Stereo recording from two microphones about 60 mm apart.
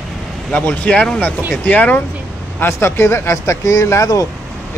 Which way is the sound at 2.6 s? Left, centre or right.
Left.